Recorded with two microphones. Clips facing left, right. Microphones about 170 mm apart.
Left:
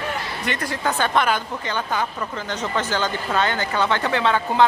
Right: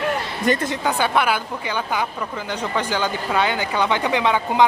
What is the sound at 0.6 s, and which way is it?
Speech, 20° right (ahead or behind).